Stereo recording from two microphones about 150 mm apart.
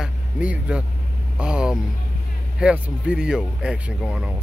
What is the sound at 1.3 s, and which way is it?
Vehicle, 5° right (ahead or behind).